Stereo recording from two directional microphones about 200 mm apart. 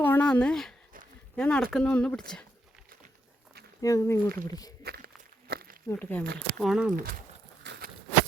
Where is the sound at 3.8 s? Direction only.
15° left (ahead or behind).